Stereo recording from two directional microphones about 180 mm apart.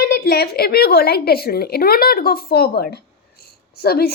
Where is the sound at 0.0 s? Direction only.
60° left (ahead or behind).